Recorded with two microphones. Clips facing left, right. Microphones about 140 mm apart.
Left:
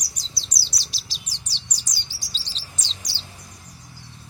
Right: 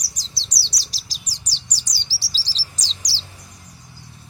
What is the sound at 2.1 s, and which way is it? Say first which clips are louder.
Chirp: right 2 dB; 35° right (ahead or behind).